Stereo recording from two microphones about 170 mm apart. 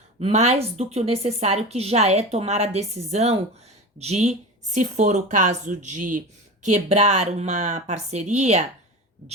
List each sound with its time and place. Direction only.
0.2 s a woman's voice: 40° right (ahead or behind)